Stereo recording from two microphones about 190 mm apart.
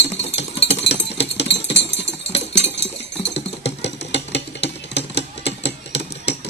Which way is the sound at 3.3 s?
65° left (ahead or behind).